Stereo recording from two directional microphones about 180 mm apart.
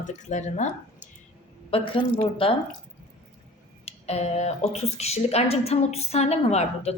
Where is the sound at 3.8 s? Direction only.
35° left (ahead or behind).